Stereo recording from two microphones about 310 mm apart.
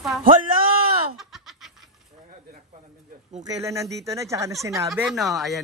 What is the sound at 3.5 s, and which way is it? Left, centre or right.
Speech, centre.